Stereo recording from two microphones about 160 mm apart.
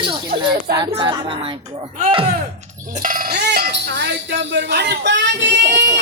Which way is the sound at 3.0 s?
60° right (ahead or behind).